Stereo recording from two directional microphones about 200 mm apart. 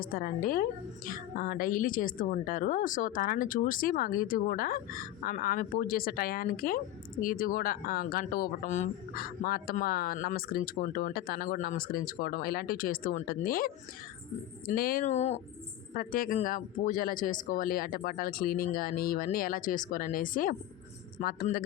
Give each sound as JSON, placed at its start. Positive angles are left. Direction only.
{"t": 0.0, "sound": "a woman's voice", "side_deg": 45}
{"t": 16.0, "sound": "a woman's voice", "side_deg": 45}